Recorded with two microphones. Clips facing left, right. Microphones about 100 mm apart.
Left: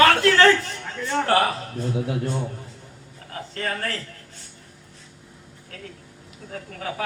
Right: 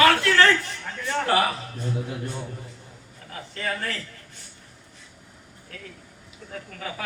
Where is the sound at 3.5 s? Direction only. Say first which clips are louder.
Left 1 dB; 45° left (ahead or behind).